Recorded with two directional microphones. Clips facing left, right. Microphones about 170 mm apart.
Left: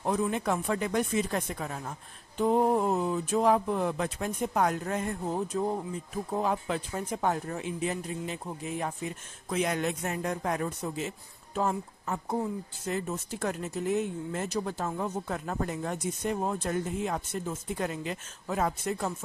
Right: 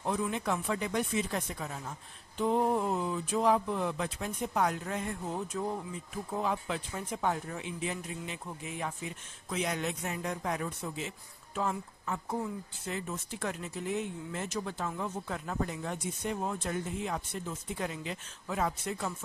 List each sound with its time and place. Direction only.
0.0 s speech: 45° left (ahead or behind)
6.3 s speech: 45° left (ahead or behind)